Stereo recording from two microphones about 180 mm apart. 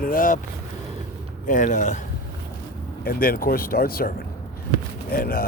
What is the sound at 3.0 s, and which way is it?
Speech, 55° left (ahead or behind).